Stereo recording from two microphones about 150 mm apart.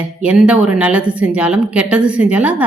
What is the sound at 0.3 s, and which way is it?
A woman's voice, 5° right (ahead or behind).